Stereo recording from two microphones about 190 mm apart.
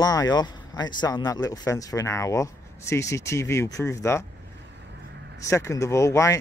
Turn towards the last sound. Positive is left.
turn(degrees=15)  # may be behind; listen again after turning